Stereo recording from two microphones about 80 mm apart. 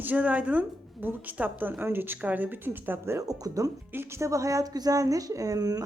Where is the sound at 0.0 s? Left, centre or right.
Right.